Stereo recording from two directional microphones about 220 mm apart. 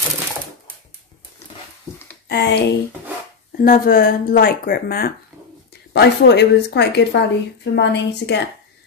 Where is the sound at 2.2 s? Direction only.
50° left (ahead or behind).